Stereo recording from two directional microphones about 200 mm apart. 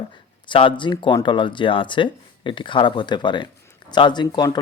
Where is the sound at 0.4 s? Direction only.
25° left (ahead or behind).